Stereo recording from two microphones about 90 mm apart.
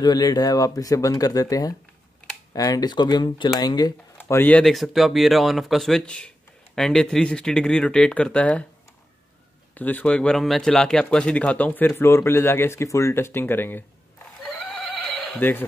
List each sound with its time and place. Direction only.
0.0 s speech: 50° left (ahead or behind)
4.2 s speech: 20° left (ahead or behind)
4.6 s speech: 5° left (ahead or behind)
9.8 s speech: 20° left (ahead or behind)
14.6 s neigh: 5° left (ahead or behind)
15.3 s speech: 20° left (ahead or behind)